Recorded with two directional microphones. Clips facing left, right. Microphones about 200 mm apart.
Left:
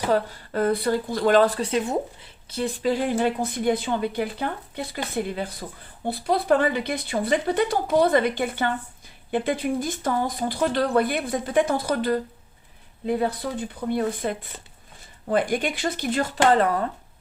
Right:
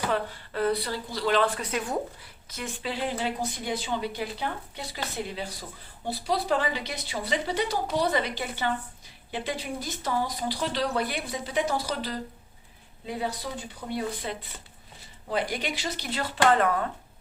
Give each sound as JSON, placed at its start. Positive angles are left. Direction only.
{"t": 0.1, "sound": "a woman's voice", "side_deg": 45}
{"t": 16.4, "sound": "speech", "side_deg": 35}